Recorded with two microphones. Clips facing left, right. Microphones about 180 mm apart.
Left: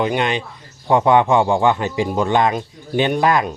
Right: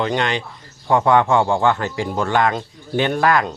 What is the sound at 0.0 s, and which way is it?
A man's voice, 15° left (ahead or behind).